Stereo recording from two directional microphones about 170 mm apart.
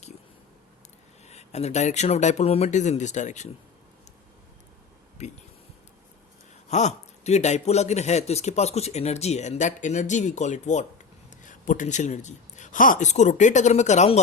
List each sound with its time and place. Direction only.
1.3 s speech: 40° left (ahead or behind)
5.2 s speech: 40° left (ahead or behind)
6.7 s speech: 40° left (ahead or behind)